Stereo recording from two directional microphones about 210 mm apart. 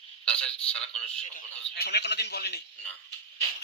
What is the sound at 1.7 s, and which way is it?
Speech, 50° left (ahead or behind).